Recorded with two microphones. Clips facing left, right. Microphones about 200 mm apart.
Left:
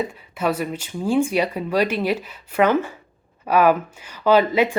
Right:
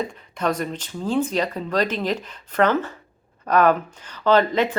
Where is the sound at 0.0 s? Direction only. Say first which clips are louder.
Left 1 dB; 5° left (ahead or behind).